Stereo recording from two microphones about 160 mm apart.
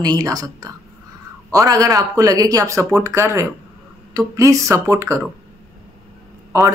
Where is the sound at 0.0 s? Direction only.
25° right (ahead or behind).